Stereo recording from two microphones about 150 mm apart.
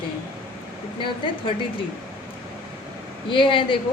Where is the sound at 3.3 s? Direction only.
35° left (ahead or behind).